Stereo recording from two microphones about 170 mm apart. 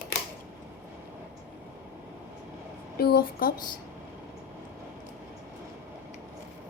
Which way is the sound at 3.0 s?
65° left (ahead or behind).